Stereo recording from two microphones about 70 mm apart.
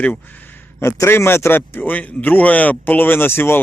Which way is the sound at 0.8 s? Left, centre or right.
Left.